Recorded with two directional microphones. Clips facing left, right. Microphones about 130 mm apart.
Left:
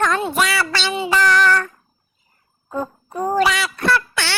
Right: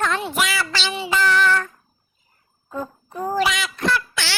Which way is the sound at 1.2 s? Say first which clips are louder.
Left 2 dB; 75° left (ahead or behind).